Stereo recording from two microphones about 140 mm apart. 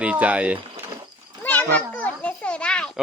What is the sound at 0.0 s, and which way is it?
Speech, 10° right (ahead or behind).